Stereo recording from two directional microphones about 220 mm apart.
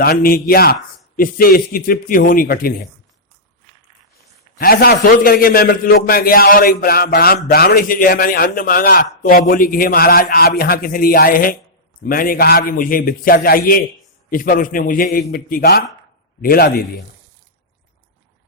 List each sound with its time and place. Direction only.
0.0 s a man's voice: 40° left (ahead or behind)
4.6 s a man's voice: 45° left (ahead or behind)